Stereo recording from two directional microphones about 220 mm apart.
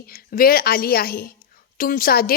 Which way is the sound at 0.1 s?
40° left (ahead or behind).